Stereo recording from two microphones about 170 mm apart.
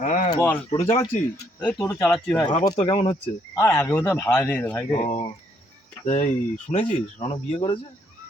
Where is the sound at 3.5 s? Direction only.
15° left (ahead or behind).